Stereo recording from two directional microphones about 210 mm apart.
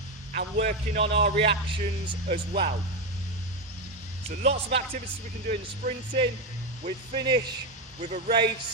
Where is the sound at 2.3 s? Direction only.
50° right (ahead or behind).